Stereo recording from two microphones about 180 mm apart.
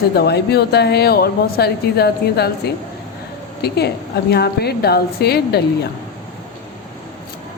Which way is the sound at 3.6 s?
65° left (ahead or behind).